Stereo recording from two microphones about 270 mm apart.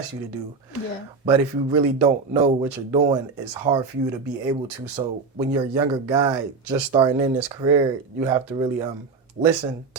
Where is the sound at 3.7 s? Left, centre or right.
Right.